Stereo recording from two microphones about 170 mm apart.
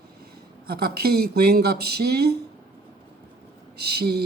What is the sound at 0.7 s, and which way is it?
Speech, 65° right (ahead or behind).